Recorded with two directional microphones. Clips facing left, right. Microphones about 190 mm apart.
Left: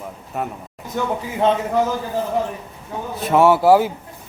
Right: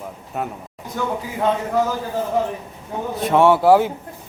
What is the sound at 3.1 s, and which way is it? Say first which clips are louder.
Speech: even; 5° left (ahead or behind).